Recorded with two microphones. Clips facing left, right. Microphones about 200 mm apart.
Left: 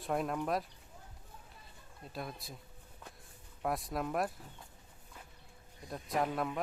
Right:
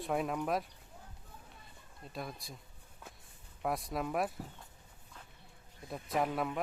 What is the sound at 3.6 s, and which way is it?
Speech, centre (ahead or behind).